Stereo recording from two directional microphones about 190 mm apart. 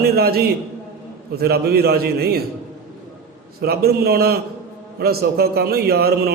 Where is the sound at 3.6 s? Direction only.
55° right (ahead or behind).